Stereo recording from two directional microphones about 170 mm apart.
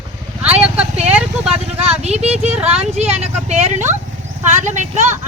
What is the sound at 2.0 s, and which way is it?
A woman's voice, 40° right (ahead or behind).